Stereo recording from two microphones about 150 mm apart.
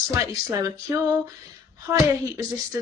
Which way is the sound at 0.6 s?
20° right (ahead or behind).